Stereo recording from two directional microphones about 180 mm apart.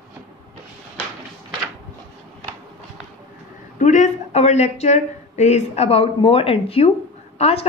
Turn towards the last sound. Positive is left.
turn(degrees=35)  # may be behind; listen again after turning